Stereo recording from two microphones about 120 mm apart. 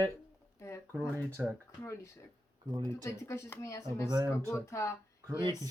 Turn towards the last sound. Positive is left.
turn(degrees=25)  # may be behind; listen again after turning